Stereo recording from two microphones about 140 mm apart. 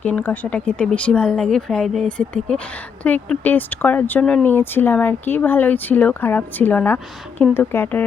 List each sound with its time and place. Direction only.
0.0 s speech: 10° left (ahead or behind)